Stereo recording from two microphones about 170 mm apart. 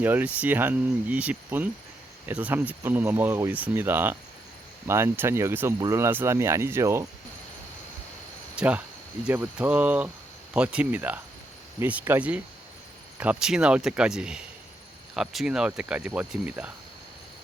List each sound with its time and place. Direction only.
0.0 s speech: 10° right (ahead or behind)
8.5 s cricket: 10° right (ahead or behind)
9.2 s speech: 10° right (ahead or behind)